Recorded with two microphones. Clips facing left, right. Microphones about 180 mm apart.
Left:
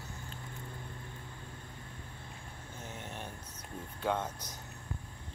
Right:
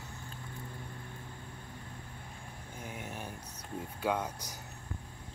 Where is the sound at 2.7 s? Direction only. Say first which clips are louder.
Right 2 dB; 10° right (ahead or behind).